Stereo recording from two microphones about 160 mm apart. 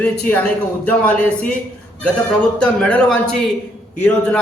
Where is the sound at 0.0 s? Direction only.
10° left (ahead or behind).